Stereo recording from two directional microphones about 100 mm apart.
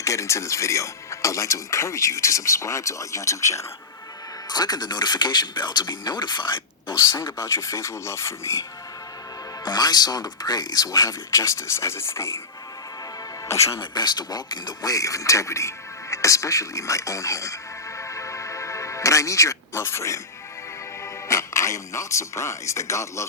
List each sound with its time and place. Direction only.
0.0 s speech: 30° left (ahead or behind)
4.4 s speech: 40° left (ahead or behind)
6.9 s speech: 30° left (ahead or behind)
9.6 s speech: 45° left (ahead or behind); by 12.4 s 25° left (ahead or behind)
13.5 s speech: 30° left (ahead or behind)
13.9 s speech: 45° left (ahead or behind); by 23.2 s 30° left (ahead or behind)